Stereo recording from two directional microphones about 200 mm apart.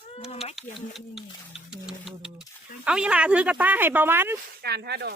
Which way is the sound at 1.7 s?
5° right (ahead or behind).